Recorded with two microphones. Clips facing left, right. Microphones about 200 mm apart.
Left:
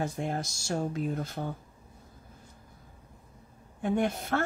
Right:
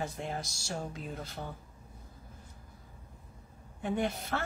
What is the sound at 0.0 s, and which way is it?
Speech, 50° left (ahead or behind).